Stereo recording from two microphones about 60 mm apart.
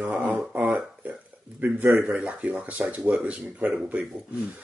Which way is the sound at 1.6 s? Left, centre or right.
Right.